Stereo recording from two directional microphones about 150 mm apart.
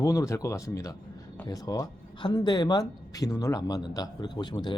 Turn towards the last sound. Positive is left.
turn(degrees=30)  # may be behind; listen again after turning